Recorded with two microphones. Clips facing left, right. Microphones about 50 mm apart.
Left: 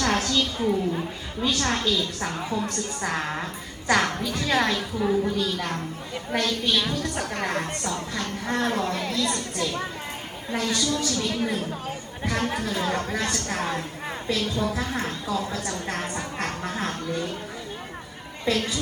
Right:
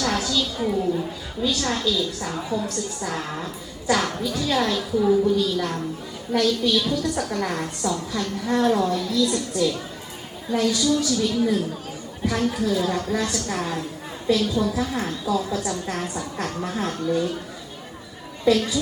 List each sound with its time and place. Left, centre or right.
0.0 s a sound: left
0.6 s a woman's voice: left
1.5 s a woman's voice: left
18.4 s a woman's voice: left